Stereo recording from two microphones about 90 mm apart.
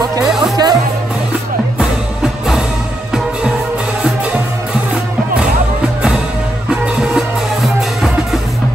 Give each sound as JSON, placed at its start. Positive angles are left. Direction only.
{"t": 0.4, "sound": "music", "side_deg": -45}
{"t": 1.8, "sound": "music", "side_deg": -5}
{"t": 6.7, "sound": "music", "side_deg": -5}